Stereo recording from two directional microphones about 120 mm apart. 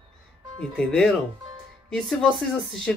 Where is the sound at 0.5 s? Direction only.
5° left (ahead or behind).